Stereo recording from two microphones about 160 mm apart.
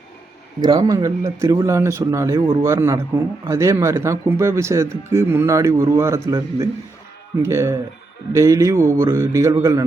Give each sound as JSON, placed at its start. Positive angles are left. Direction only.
{"t": 0.6, "sound": "a man's voice", "side_deg": -25}